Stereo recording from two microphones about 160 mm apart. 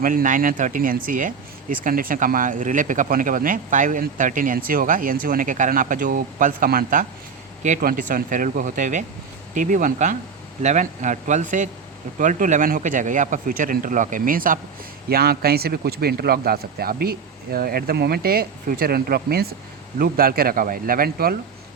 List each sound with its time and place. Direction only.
0.0 s a man's voice: 60° right (ahead or behind)
15.1 s speech: 75° right (ahead or behind)
20.0 s speech: 65° right (ahead or behind)